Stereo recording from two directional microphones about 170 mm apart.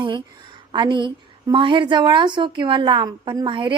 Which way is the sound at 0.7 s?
25° right (ahead or behind).